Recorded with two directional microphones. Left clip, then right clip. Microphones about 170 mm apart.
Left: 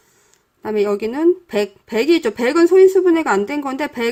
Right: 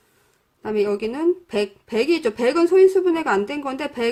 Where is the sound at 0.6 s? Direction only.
30° left (ahead or behind).